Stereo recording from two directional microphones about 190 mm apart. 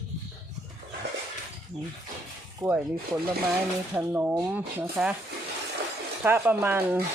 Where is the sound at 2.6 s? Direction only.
20° right (ahead or behind).